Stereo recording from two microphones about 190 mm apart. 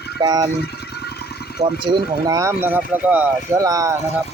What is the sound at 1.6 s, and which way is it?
Speech, 30° right (ahead or behind).